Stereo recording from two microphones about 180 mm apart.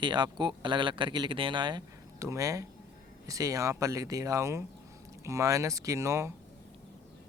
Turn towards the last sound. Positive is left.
turn(degrees=-15)  # may be behind; listen again after turning